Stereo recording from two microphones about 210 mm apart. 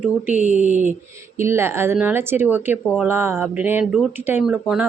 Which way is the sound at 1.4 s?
10° right (ahead or behind).